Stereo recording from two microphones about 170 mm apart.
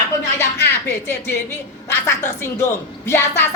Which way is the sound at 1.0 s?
15° left (ahead or behind).